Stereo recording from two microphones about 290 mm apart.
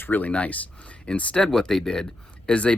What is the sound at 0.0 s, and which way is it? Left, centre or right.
Speech, centre.